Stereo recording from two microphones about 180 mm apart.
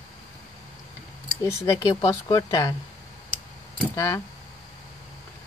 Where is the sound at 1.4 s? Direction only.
20° left (ahead or behind).